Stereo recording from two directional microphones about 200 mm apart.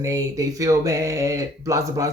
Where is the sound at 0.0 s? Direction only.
15° right (ahead or behind).